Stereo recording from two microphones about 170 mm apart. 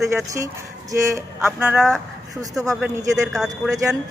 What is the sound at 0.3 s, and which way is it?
Speech, 20° right (ahead or behind).